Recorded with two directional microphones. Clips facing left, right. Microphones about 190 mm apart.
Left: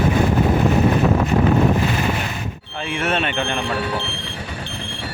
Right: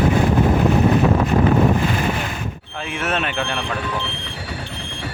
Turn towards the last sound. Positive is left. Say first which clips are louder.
# left 1 dB
turn(degrees=-5)  # may be behind; listen again after turning